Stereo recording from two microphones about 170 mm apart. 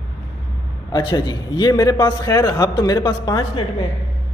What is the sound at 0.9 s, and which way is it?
A man's voice, 25° left (ahead or behind).